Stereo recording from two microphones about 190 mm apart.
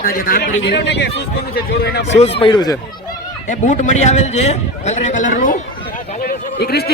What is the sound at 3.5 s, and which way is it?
A man's voice, 40° left (ahead or behind).